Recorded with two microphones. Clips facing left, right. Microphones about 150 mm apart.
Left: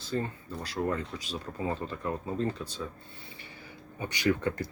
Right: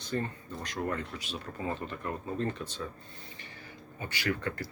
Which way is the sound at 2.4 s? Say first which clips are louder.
Left 2 dB; 10° left (ahead or behind).